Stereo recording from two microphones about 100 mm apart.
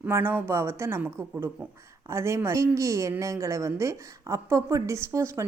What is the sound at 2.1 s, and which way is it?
A woman's voice, 30° right (ahead or behind).